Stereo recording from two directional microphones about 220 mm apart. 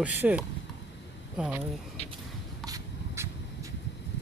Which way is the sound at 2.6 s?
15° right (ahead or behind).